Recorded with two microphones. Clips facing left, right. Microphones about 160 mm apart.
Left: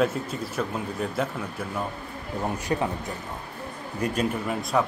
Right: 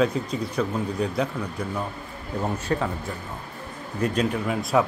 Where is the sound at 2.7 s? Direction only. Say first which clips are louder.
Even; 20° left (ahead or behind).